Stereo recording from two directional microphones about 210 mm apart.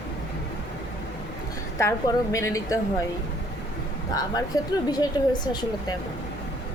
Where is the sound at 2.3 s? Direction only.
15° left (ahead or behind).